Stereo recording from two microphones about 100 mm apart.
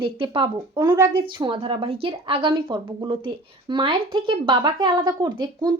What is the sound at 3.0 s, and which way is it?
Speech, 50° right (ahead or behind).